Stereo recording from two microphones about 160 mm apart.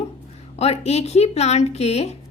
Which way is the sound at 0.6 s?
40° left (ahead or behind).